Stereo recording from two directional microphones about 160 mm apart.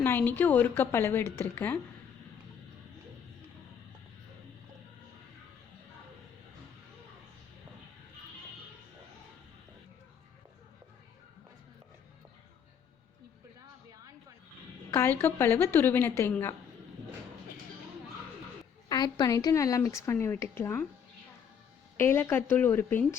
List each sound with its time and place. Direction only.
0.0 s a woman's voice: 10° left (ahead or behind)
14.9 s a woman's voice: 15° left (ahead or behind)
18.9 s speech: 25° left (ahead or behind)
21.9 s a woman's voice: 15° left (ahead or behind)